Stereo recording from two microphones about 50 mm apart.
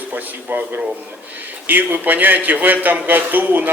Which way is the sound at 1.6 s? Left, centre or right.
Right.